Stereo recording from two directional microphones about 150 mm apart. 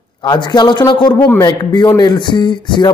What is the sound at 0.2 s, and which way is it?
A man's voice, 30° left (ahead or behind).